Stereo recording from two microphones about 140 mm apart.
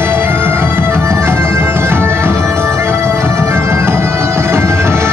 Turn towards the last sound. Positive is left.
turn(degrees=-20)  # may be behind; listen again after turning